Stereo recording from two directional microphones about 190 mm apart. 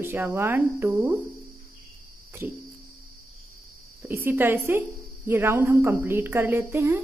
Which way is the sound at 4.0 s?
10° right (ahead or behind).